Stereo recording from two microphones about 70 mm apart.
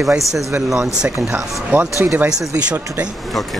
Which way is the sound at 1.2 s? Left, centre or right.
Centre.